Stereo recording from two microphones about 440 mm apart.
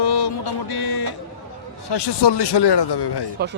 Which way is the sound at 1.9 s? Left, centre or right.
Left.